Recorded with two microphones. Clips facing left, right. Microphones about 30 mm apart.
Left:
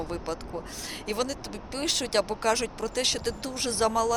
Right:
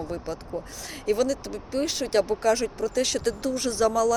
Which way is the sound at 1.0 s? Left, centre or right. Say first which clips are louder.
Right 7 dB; left.